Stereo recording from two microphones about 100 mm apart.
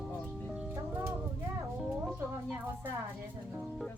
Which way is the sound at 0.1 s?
15° left (ahead or behind).